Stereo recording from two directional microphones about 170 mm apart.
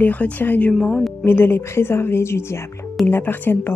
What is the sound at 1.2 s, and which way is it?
Speech, 15° left (ahead or behind).